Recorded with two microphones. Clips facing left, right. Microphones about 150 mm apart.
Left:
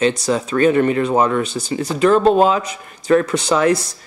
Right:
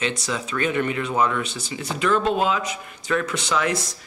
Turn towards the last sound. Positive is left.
turn(degrees=40)  # may be behind; listen again after turning